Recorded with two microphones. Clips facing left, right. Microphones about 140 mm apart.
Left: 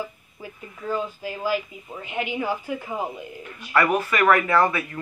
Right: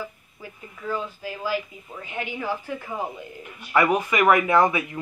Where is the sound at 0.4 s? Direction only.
15° left (ahead or behind).